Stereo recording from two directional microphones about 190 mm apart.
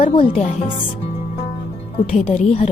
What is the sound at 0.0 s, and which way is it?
Speech, 30° left (ahead or behind).